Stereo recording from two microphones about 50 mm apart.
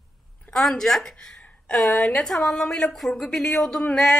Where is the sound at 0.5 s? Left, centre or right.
Centre.